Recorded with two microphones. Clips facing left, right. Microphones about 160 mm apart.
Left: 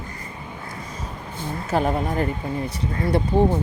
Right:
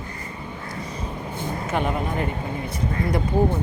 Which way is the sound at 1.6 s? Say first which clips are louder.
Left 4 dB; 35° left (ahead or behind).